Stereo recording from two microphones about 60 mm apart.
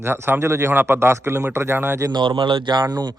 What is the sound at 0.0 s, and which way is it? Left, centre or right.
A man's voice, right.